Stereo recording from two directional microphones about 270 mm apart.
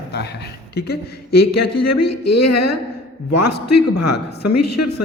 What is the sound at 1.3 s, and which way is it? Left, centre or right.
Speech, left.